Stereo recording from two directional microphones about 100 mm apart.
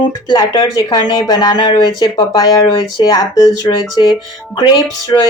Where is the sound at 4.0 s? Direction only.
50° left (ahead or behind).